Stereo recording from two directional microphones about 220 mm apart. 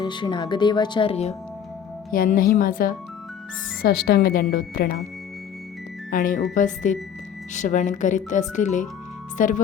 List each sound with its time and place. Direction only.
0.0 s speech: 20° left (ahead or behind)
2.1 s a woman's voice: 40° left (ahead or behind)
6.1 s speech: 35° left (ahead or behind)